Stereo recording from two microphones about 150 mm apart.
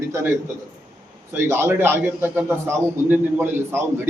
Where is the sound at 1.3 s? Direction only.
15° right (ahead or behind).